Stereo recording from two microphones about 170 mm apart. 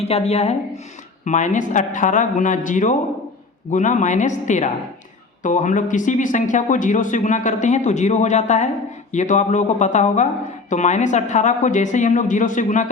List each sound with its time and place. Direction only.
0.0 s speech: 40° left (ahead or behind)